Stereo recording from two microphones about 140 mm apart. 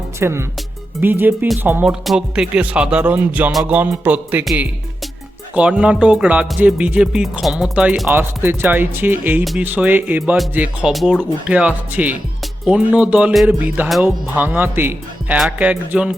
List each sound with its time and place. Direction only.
0.2 s speech: 20° right (ahead or behind)
1.0 s music: 15° right (ahead or behind)
5.5 s music: 10° right (ahead or behind)
8.1 s music: 15° right (ahead or behind)
10.9 s music: centre (ahead or behind)